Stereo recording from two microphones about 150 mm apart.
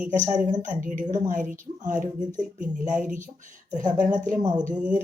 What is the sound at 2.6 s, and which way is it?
A woman's voice, 60° right (ahead or behind).